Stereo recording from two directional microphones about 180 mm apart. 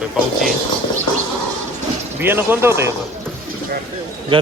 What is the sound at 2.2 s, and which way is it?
Speech, 10° right (ahead or behind).